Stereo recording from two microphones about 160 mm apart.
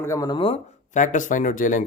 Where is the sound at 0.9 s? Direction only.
50° left (ahead or behind).